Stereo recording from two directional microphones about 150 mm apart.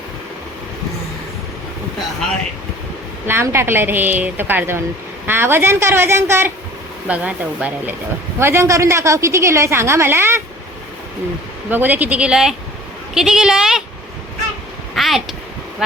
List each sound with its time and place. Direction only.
3.2 s a woman's voice: 15° right (ahead or behind)
11.7 s a woman's voice: 10° right (ahead or behind)
14.9 s a sound: centre (ahead or behind)